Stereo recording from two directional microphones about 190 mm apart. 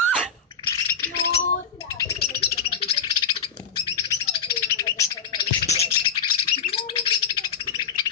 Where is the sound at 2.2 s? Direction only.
55° left (ahead or behind).